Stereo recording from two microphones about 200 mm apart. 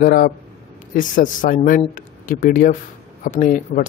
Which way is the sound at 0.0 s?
45° left (ahead or behind).